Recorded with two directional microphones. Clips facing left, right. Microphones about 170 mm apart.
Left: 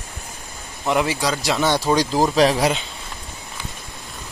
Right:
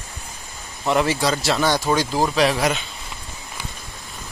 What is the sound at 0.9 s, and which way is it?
Speech, 10° left (ahead or behind).